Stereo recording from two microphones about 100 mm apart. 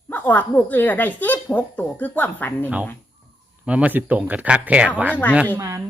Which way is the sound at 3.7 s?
15° right (ahead or behind).